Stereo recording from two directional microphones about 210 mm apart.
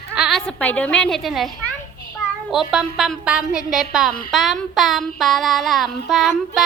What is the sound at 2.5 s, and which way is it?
A woman's voice, centre (ahead or behind).